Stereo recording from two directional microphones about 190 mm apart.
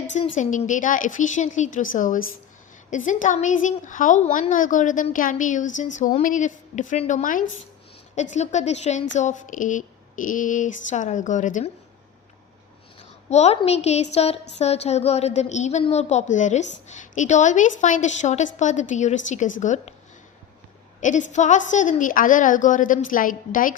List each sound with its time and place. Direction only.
0.3 s a woman's voice: 40° left (ahead or behind)
13.3 s a woman's voice: 35° left (ahead or behind)
21.0 s a woman's voice: 40° left (ahead or behind)